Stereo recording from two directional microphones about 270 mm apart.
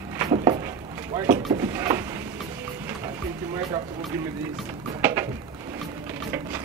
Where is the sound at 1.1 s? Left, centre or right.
Centre.